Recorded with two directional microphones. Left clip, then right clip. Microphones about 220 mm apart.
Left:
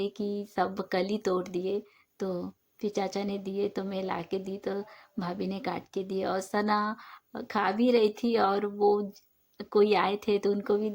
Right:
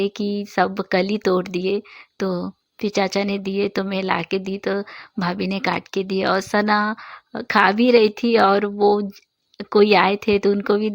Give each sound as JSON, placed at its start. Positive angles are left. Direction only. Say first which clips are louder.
{"t": 0.0, "sound": "speech", "louder": "right 9 dB", "side_deg": -30}